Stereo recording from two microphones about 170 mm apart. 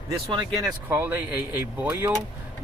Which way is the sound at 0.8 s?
10° right (ahead or behind).